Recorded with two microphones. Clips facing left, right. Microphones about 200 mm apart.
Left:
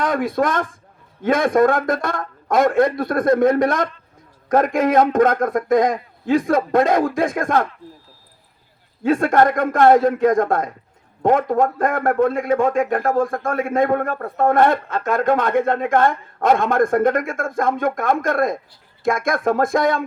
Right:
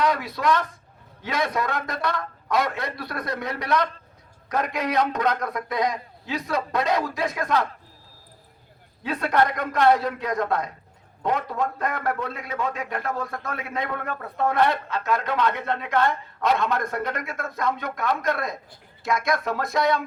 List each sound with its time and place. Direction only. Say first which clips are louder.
0.0 s a man's voice: left 4 dB; 50° left (ahead or behind)
9.0 s a man's voice: left 7 dB; 50° left (ahead or behind)